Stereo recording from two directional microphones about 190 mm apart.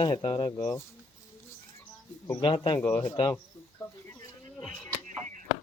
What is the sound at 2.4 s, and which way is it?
Speech, 25° left (ahead or behind).